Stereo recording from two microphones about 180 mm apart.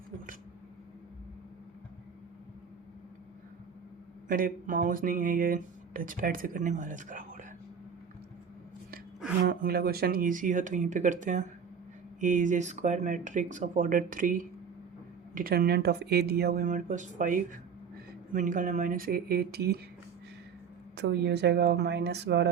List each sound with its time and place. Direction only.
4.3 s speech: 50° right (ahead or behind)
9.4 s speech: 55° right (ahead or behind)
20.9 s speech: 70° right (ahead or behind)